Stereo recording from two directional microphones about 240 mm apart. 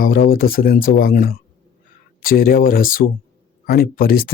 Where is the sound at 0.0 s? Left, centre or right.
Left.